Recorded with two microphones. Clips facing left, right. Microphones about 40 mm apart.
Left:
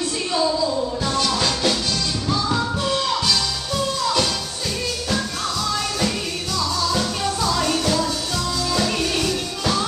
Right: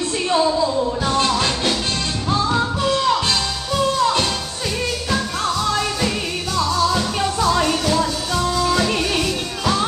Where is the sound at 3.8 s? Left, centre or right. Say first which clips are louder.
Right 4 dB; right.